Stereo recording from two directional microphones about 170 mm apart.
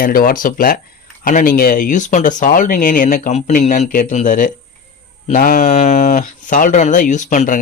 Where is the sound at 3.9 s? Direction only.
55° left (ahead or behind).